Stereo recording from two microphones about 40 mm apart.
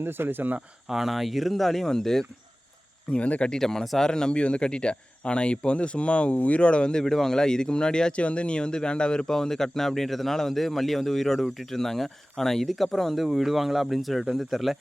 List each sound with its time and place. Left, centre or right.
0.0 s speech: right
0.9 s speech: centre
3.2 s speech: left
3.6 s speech: centre
7.0 s speech: centre